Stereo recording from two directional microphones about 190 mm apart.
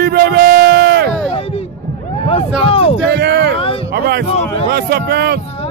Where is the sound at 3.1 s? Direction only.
60° right (ahead or behind).